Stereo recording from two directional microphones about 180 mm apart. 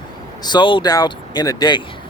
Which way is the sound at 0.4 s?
25° left (ahead or behind).